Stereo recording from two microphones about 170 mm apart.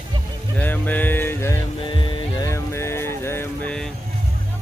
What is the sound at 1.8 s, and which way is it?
Music, 30° left (ahead or behind).